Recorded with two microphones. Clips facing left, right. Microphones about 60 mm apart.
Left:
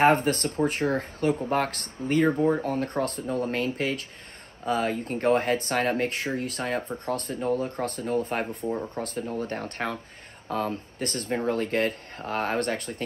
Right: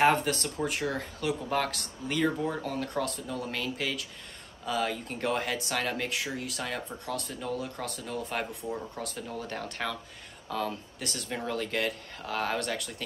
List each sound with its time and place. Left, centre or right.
0.0 s speech: left